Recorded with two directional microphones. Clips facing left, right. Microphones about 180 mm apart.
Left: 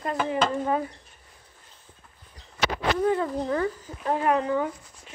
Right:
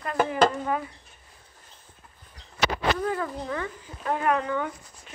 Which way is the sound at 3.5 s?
35° left (ahead or behind).